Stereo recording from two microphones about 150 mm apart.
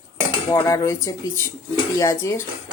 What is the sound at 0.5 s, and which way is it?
Speech, 20° left (ahead or behind).